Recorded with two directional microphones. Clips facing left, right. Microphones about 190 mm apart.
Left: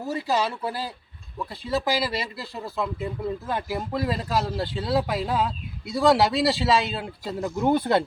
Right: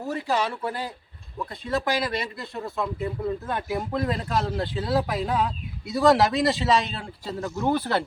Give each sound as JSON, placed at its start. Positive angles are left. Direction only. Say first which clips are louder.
{"t": 0.1, "sound": "speech", "louder": "left 1 dB", "side_deg": 10}
{"t": 7.4, "sound": "speech", "louder": "left 3 dB", "side_deg": 20}